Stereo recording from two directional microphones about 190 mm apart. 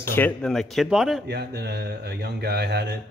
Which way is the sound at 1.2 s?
60° right (ahead or behind).